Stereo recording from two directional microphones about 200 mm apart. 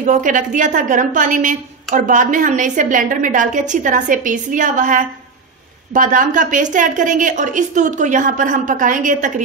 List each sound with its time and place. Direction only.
0.0 s a woman's voice: 40° right (ahead or behind)